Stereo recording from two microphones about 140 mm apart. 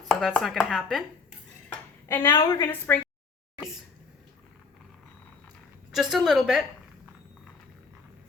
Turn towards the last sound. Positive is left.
turn(degrees=0)  # may be behind; listen again after turning